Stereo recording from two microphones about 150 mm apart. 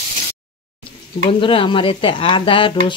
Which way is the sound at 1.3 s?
35° left (ahead or behind).